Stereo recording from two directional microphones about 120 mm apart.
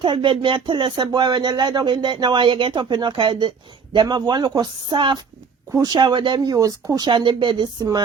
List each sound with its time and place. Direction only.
0.0 s speech: 45° right (ahead or behind)